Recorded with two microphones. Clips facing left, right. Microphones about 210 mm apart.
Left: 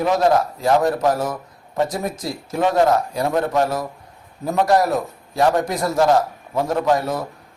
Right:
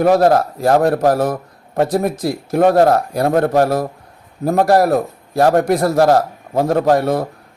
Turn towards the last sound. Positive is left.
turn(degrees=-60)  # may be behind; listen again after turning